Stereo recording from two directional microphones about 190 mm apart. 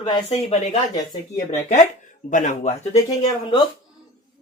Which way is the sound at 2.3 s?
40° left (ahead or behind).